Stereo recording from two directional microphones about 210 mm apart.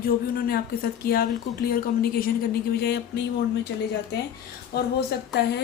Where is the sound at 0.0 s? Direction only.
45° left (ahead or behind).